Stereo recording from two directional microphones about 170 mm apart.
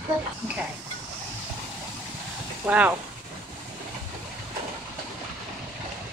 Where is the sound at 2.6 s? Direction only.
5° right (ahead or behind).